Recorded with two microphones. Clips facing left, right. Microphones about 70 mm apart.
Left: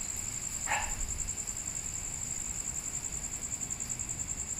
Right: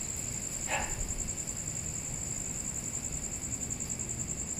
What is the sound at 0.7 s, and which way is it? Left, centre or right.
Insect, left.